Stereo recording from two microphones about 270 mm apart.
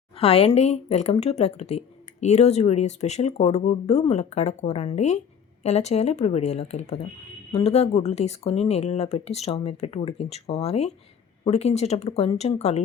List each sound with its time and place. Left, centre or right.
0.2 s speech: left